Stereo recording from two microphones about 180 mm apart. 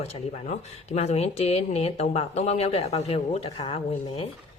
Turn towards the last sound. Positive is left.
turn(degrees=30)  # may be behind; listen again after turning